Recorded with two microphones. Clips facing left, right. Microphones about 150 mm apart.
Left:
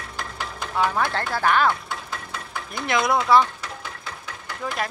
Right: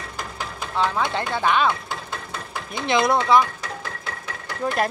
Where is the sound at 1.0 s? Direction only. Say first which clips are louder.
Even; 20° right (ahead or behind).